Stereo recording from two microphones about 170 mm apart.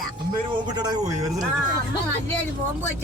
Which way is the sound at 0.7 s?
25° right (ahead or behind).